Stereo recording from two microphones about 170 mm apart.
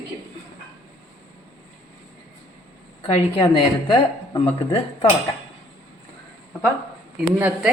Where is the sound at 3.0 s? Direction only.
30° left (ahead or behind).